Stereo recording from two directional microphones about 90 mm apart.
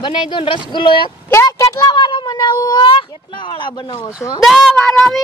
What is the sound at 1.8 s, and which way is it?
Speech, 60° left (ahead or behind).